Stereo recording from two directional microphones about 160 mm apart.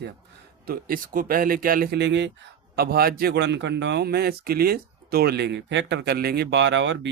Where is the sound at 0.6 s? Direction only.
65° right (ahead or behind); by 2.3 s 90° right.